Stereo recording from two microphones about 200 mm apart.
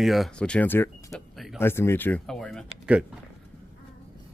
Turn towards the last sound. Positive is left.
turn(degrees=0)  # may be behind; listen again after turning